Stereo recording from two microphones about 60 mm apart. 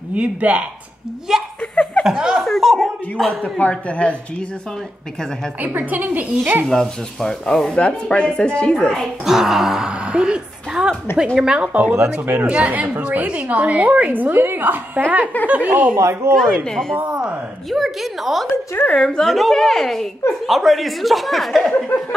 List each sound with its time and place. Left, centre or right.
0.1 s a woman's voice: right
1.6 s laughter: left
2.0 s speech: centre
2.4 s chuckle: centre
3.5 s speech: left
5.6 s a woman's voice: right
6.7 s speech: centre
9.2 s a woman's voice: centre; by 16.0 s right
16.0 s speech: right
16.3 s speech: centre
17.1 s a woman's voice: centre
17.6 s a woman's voice: centre
18.9 s speech: centre
19.2 s a woman's voice: centre